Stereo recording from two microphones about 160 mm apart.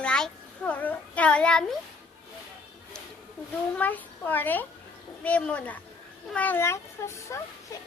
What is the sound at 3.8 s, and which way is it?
A child's voice, 10° left (ahead or behind).